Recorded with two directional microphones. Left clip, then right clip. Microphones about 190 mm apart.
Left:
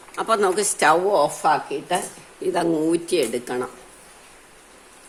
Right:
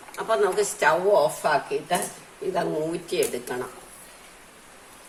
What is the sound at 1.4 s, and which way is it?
Speech, 40° left (ahead or behind).